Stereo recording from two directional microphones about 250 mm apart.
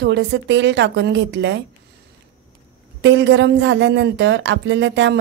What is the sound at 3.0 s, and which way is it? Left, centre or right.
A woman's voice, right.